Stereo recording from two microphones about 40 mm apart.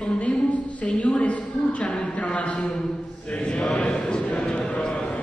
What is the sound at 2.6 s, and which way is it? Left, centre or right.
Speech, centre.